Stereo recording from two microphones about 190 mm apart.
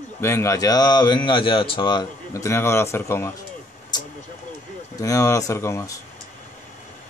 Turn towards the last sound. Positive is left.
turn(degrees=15)  # may be behind; listen again after turning